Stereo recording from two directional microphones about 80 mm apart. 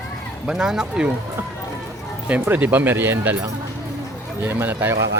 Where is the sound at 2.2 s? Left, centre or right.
Centre.